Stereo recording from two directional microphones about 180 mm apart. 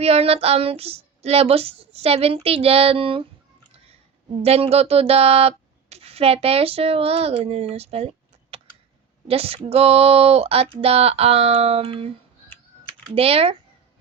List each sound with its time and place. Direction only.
0.0 s female singing: 35° right (ahead or behind)
4.4 s a woman's voice: 35° right (ahead or behind)
9.2 s female singing: 30° right (ahead or behind)
13.1 s female singing: 30° right (ahead or behind)